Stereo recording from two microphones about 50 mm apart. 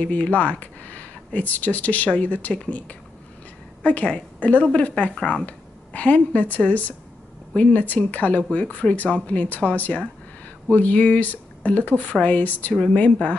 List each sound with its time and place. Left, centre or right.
0.0 s speech: left